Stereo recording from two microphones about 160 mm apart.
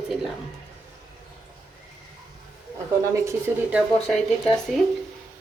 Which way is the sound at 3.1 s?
15° right (ahead or behind).